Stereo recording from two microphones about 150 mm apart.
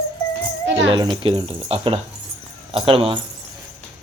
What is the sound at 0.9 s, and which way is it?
Speech, 30° right (ahead or behind).